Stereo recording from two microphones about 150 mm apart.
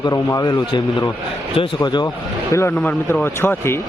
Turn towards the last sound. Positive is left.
turn(degrees=15)  # may be behind; listen again after turning